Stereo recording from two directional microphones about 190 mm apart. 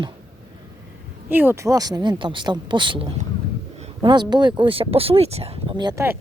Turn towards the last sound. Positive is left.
turn(degrees=-20)  # may be behind; listen again after turning